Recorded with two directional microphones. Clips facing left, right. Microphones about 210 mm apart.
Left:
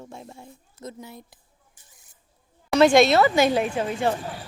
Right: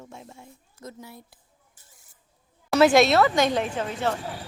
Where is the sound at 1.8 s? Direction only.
15° left (ahead or behind).